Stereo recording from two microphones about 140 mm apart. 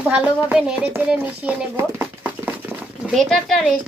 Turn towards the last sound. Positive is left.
turn(degrees=0)  # may be behind; listen again after turning